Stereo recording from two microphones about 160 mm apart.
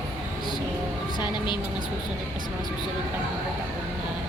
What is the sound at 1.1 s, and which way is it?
Speech, 30° left (ahead or behind).